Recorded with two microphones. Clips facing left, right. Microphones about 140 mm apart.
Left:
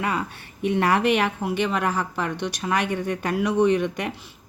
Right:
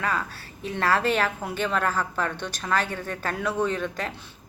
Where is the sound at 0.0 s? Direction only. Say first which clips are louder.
Left 2 dB; 20° left (ahead or behind).